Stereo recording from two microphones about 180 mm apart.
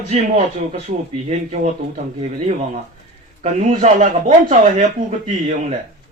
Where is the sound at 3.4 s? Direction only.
35° right (ahead or behind).